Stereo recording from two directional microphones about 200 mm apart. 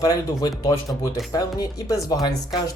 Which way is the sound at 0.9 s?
Centre (ahead or behind).